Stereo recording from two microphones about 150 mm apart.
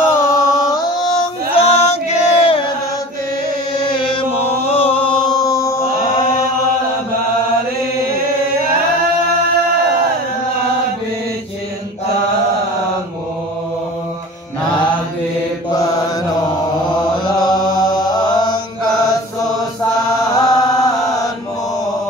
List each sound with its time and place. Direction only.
0.0 s music: 20° left (ahead or behind)
1.5 s chant: 45° left (ahead or behind)
3.9 s chant: 35° left (ahead or behind)
5.4 s mantra: 20° left (ahead or behind)
17.2 s chant: 30° left (ahead or behind)
20.5 s chant: 25° left (ahead or behind)